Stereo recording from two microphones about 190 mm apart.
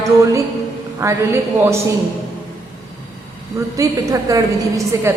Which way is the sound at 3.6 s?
15° right (ahead or behind).